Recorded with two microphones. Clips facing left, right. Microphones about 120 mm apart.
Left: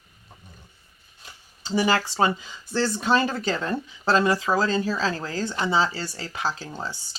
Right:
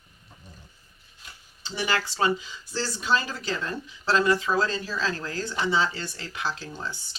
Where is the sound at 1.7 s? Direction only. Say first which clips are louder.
Left 6 dB; 35° left (ahead or behind).